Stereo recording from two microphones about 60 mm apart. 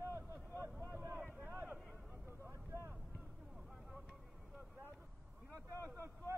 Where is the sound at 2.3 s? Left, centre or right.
Right.